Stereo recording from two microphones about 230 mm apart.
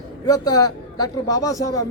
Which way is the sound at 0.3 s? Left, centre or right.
Centre.